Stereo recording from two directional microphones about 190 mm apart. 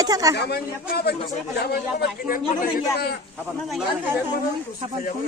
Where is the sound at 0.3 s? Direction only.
60° left (ahead or behind).